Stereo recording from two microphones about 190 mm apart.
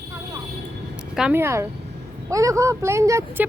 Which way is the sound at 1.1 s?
10° right (ahead or behind).